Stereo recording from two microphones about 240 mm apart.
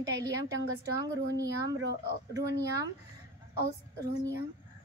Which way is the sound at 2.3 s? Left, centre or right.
Centre.